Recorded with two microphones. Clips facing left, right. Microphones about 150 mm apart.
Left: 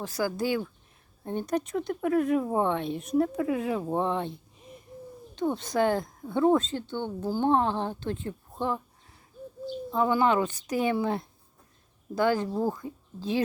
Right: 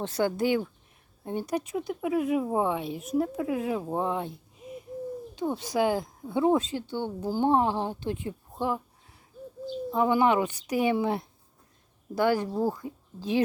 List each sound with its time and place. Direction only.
0.0 s speech: 30° right (ahead or behind); by 8.8 s 10° right (ahead or behind)
9.9 s speech: 15° right (ahead or behind)